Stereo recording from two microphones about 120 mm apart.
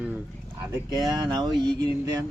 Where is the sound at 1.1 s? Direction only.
35° right (ahead or behind).